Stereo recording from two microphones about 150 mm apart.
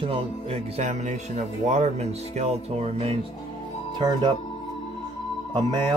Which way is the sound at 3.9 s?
30° right (ahead or behind).